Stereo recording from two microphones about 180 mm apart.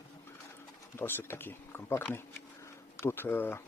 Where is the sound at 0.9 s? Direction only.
10° left (ahead or behind).